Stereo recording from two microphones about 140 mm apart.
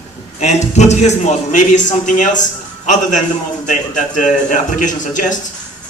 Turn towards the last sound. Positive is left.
turn(degrees=65)  # may be behind; listen again after turning